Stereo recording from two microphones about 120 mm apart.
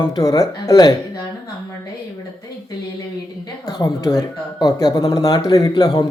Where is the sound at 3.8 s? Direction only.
35° left (ahead or behind).